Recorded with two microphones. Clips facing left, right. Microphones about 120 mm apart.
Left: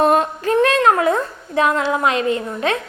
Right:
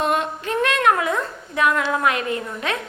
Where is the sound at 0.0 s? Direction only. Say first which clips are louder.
Left 6 dB; 40° left (ahead or behind).